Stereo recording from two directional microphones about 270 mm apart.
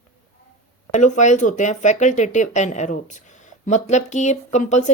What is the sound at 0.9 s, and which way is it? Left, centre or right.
Speech, left.